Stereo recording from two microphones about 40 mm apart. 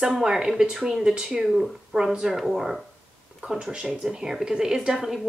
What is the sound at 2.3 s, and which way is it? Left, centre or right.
Speech, centre.